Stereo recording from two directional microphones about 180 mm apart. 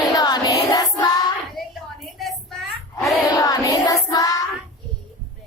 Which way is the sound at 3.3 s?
20° left (ahead or behind).